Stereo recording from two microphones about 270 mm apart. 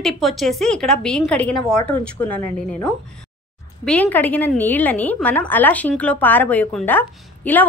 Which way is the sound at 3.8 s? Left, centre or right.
Centre.